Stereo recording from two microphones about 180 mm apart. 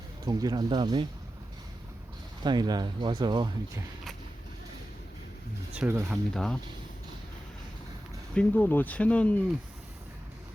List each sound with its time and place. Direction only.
0.3 s speech: 20° right (ahead or behind)
2.4 s speech: 20° right (ahead or behind)
5.7 s speech: 10° right (ahead or behind)
6.3 s speech: 5° left (ahead or behind)
8.4 s speech: 10° left (ahead or behind)